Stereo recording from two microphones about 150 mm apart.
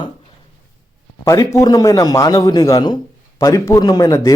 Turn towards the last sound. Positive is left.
turn(degrees=25)  # may be behind; listen again after turning